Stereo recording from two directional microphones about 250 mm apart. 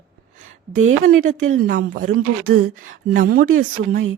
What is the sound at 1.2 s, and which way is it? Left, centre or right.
Speech, right.